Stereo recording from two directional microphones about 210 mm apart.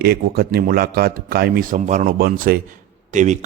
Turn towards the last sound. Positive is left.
turn(degrees=-35)  # may be behind; listen again after turning